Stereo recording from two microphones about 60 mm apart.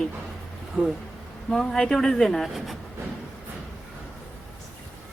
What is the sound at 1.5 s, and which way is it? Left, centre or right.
A woman's voice, centre.